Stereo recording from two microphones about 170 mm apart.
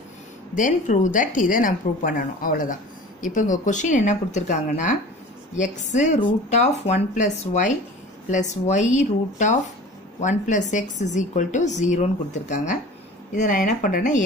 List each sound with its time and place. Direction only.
0.6 s a woman's voice: 50° left (ahead or behind)